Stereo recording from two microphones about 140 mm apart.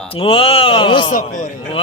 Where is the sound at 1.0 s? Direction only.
65° left (ahead or behind).